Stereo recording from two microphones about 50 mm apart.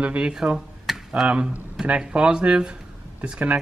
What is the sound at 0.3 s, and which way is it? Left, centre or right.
Speech, centre.